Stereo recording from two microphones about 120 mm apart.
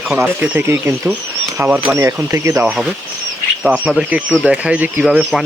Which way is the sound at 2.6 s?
10° right (ahead or behind).